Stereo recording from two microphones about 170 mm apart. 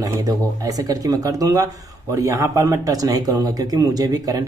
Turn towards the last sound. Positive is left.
turn(degrees=-20)  # may be behind; listen again after turning